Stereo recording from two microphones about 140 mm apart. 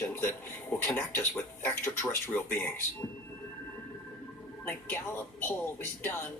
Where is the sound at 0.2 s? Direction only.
15° left (ahead or behind).